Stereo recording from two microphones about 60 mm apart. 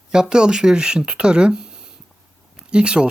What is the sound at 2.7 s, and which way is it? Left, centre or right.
Speech, centre.